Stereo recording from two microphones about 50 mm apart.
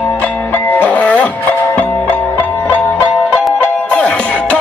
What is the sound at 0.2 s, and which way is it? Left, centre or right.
Music, left.